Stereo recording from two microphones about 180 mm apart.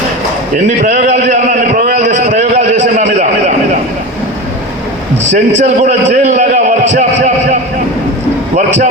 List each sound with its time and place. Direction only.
0.5 s a sound: 45° right (ahead or behind)
5.3 s a man's voice: 40° right (ahead or behind)
8.5 s a man's voice: 45° right (ahead or behind)